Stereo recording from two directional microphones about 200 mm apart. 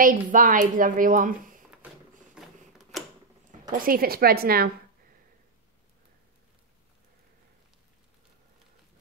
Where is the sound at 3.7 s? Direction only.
45° right (ahead or behind).